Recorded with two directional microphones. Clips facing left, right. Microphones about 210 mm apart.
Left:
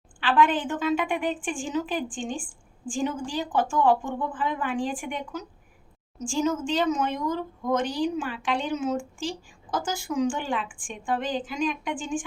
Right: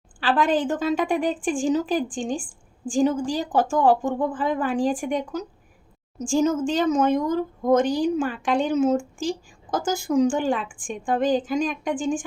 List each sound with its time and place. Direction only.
0.2 s a woman's voice: 40° right (ahead or behind)